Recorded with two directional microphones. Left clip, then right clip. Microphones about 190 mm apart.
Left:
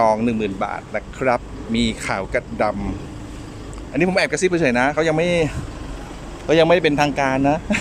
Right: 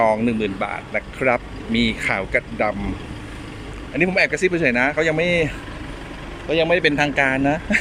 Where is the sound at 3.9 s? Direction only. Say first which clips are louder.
Even; 10° left (ahead or behind).